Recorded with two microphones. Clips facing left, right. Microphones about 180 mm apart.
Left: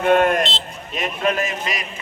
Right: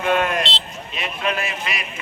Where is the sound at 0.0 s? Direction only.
50° left (ahead or behind).